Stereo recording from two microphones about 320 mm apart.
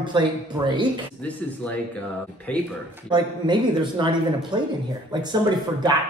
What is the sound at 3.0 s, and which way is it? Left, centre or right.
Speech, centre.